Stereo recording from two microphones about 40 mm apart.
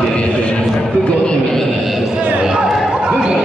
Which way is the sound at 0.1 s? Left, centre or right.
Left.